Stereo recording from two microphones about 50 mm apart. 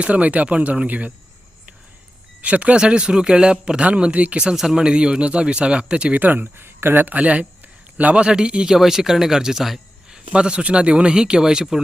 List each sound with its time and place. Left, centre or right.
0.0 s a man's voice: right
2.4 s a man's voice: right
4.4 s speech: centre
4.8 s a man's voice: centre
6.1 s speech: right
7.2 s a man's voice: right; by 10.2 s centre
10.3 s speech: right